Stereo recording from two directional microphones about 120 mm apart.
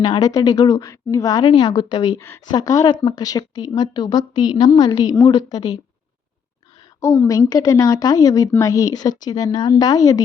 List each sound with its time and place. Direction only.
0.0 s a woman's voice: 35° left (ahead or behind)
7.0 s a woman's voice: 25° left (ahead or behind)